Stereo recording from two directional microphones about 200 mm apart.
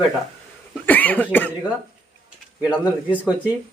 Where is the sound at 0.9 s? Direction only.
10° left (ahead or behind).